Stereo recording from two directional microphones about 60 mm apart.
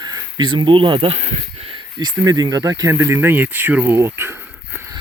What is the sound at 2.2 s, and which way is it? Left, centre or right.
Speech, right.